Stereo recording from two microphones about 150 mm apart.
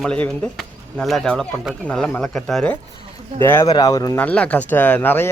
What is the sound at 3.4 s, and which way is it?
Speech, 15° left (ahead or behind).